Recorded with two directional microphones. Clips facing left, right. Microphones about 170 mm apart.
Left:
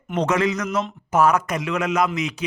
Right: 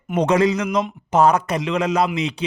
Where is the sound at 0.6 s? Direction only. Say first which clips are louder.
Right 3 dB; 15° right (ahead or behind).